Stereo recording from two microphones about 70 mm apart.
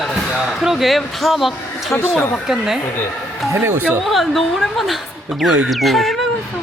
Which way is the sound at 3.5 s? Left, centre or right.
Right.